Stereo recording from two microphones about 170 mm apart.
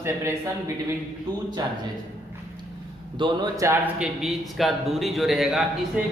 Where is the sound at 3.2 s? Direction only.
25° right (ahead or behind).